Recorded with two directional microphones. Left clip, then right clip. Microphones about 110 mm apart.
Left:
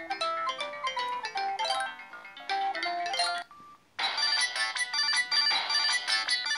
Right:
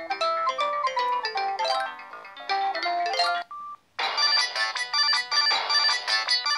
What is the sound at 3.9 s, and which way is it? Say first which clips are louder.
Ringtone: right 5 dB; 45° right (ahead or behind).